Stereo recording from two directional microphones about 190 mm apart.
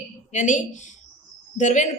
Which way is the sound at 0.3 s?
40° left (ahead or behind).